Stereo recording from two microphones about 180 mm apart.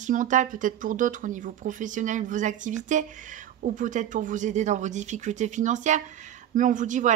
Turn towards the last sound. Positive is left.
turn(degrees=-45)  # may be behind; listen again after turning